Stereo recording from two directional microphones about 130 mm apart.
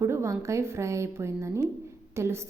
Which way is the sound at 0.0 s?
20° right (ahead or behind).